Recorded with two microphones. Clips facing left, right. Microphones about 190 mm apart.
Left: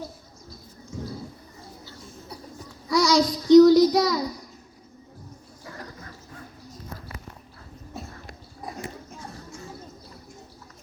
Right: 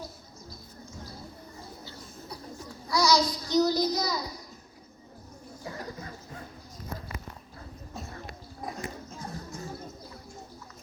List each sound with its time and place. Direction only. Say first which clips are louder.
2.9 s child singing: left 4 dB; 90° left